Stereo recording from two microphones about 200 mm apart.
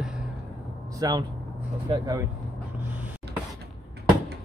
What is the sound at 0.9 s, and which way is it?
Speech, 20° right (ahead or behind).